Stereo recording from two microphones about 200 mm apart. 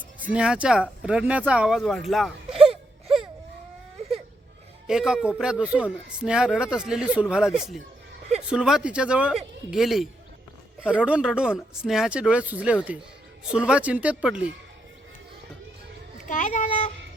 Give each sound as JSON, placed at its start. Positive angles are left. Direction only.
{"t": 0.2, "sound": "speech", "side_deg": -5}
{"t": 2.5, "sound": "wail", "side_deg": -30}
{"t": 4.9, "sound": "speech", "side_deg": -5}
{"t": 16.1, "sound": "a sound", "side_deg": 40}